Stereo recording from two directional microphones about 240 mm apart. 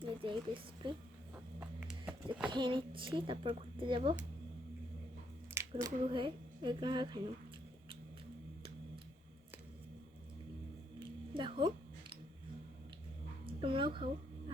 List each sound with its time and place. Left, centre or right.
0.0 s speech: right
1.5 s horse: centre
2.5 s speech: centre
5.7 s speech: centre
11.3 s a sound: centre
13.4 s a sound: right